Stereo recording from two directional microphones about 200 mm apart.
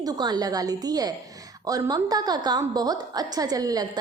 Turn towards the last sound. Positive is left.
turn(degrees=-20)  # may be behind; listen again after turning